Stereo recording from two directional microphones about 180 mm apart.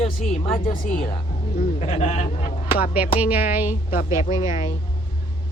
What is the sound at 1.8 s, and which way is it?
Speech, 35° left (ahead or behind).